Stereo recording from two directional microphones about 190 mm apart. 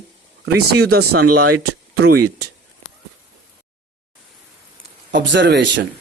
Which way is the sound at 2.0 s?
55° right (ahead or behind).